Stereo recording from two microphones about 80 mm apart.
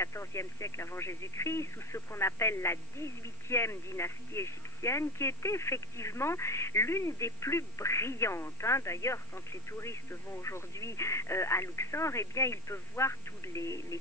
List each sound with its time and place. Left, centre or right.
0.0 s speech: left